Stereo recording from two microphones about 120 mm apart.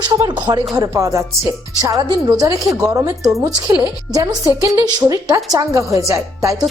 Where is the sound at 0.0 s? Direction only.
40° right (ahead or behind).